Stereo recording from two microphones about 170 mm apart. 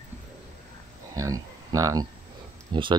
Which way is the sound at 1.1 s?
20° right (ahead or behind).